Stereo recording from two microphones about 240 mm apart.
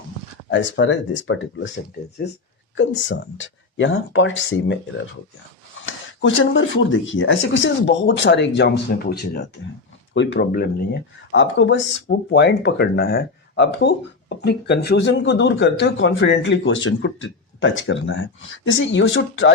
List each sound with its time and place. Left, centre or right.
0.5 s speech: left
6.3 s speech: left